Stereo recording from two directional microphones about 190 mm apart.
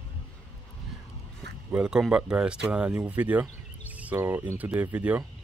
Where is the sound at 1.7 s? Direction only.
5° right (ahead or behind).